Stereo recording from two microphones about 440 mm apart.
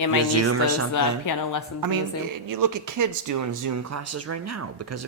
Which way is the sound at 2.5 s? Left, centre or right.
Right.